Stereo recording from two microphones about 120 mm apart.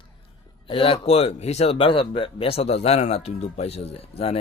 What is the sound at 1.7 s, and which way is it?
Speech, 45° left (ahead or behind).